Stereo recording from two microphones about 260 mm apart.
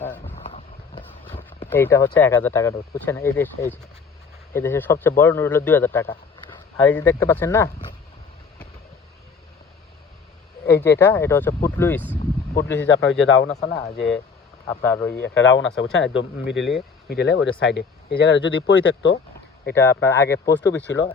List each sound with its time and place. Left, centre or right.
0.3 s vehicle: left
1.7 s a man's voice: centre
10.7 s a man's voice: centre
12.9 s speech: left
14.7 s a man's voice: centre
15.2 s speech: left
19.7 s a man's voice: centre